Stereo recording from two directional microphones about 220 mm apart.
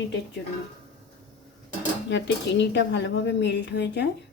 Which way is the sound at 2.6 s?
55° left (ahead or behind).